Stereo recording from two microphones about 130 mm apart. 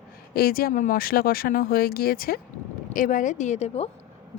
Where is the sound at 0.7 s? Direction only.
80° left.